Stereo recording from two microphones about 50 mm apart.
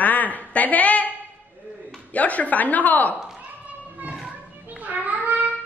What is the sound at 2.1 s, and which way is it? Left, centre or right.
A woman's voice, left.